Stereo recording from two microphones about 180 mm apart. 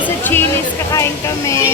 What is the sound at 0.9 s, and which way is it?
Speech, 15° left (ahead or behind).